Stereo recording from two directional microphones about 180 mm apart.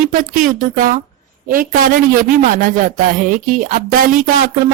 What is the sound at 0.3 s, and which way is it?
Speech, 50° right (ahead or behind).